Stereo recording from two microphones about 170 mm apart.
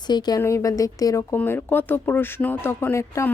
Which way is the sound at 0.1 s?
25° left (ahead or behind).